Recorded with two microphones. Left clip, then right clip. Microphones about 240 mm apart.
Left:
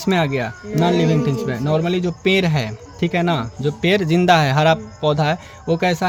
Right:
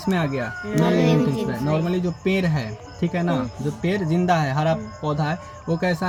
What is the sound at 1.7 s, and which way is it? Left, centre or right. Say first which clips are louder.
Speech: left 6 dB; left.